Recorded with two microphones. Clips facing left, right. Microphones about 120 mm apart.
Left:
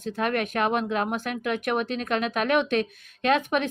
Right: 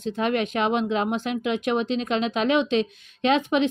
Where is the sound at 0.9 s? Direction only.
25° right (ahead or behind).